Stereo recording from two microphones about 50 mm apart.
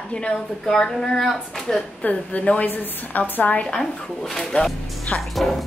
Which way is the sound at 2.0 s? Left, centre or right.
Left.